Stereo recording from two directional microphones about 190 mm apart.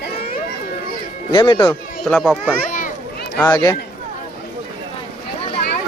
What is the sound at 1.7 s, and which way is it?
Speech, 5° left (ahead or behind).